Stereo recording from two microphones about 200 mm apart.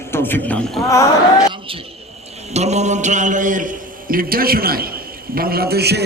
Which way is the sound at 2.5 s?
35° right (ahead or behind).